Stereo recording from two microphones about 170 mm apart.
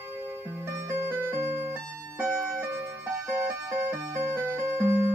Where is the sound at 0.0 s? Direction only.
10° right (ahead or behind).